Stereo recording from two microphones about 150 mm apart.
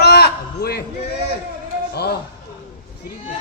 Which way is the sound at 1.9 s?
90° left.